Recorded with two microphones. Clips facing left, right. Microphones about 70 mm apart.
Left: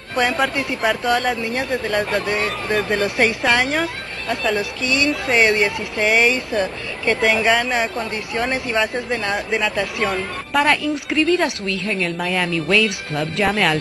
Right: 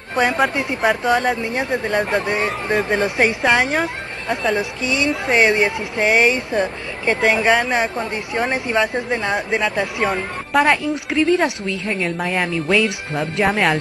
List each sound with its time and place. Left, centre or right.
0.1 s speech: centre; by 12.7 s right
13.4 s speech: centre